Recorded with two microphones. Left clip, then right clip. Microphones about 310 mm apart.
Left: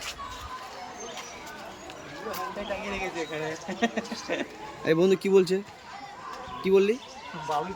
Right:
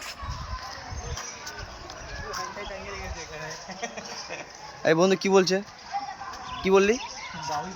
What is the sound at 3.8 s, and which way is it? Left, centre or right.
Speech, left.